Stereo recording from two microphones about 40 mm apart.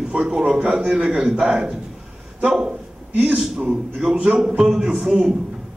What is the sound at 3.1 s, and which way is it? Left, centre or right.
Speech, right.